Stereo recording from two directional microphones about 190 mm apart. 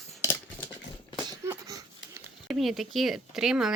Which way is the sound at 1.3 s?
15° right (ahead or behind).